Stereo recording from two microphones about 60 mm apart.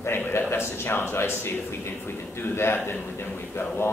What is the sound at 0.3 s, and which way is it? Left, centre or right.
A man's voice, left.